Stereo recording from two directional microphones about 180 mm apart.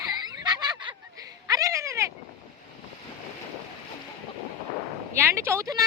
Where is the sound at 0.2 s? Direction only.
20° right (ahead or behind).